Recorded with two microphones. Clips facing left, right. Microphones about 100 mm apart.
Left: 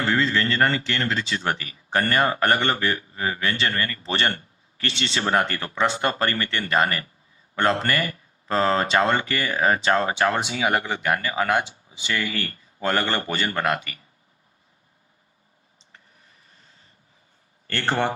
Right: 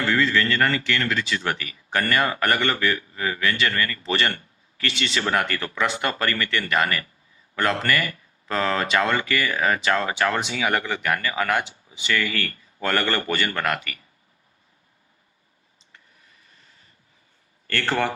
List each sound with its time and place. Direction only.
0.0 s speech: 30° left (ahead or behind)
17.7 s speech: 25° left (ahead or behind)